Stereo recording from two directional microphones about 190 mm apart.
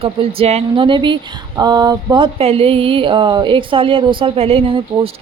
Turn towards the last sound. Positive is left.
turn(degrees=-30)  # may be behind; listen again after turning